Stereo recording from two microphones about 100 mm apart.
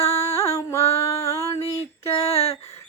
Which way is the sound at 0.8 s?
90° left.